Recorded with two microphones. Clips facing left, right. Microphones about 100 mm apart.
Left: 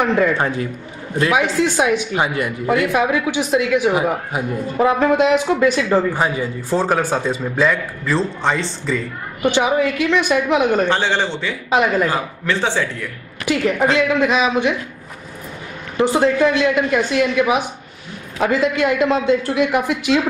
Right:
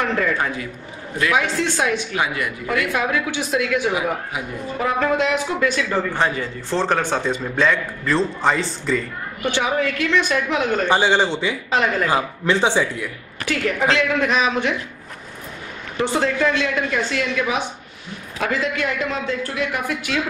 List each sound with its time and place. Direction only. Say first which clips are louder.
0.0 s a woman's voice: left 4 dB; 20° left (ahead or behind)
2.1 s a man's voice: left 3 dB; 30° left (ahead or behind); by 3.9 s 15° left (ahead or behind)
3.9 s a man's voice: left 4 dB; 35° left (ahead or behind)
4.8 s a man's voice: left 5 dB; 20° left (ahead or behind)
6.1 s a man's voice: left 2 dB; 10° left (ahead or behind)
9.4 s a woman's voice: left 5 dB; 15° left (ahead or behind)
10.9 s a man's voice: right 1 dB; 15° right (ahead or behind)
11.7 s a woman's voice: left 5 dB; 10° left (ahead or behind)
12.1 s a man's voice: right 2 dB; 15° right (ahead or behind)
13.5 s a woman's voice: left 3 dB; 15° left (ahead or behind)
16.0 s a woman's voice: left 5 dB; 10° left (ahead or behind)